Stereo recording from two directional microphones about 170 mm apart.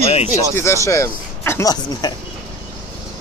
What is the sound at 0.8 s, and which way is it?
Speech, 15° left (ahead or behind).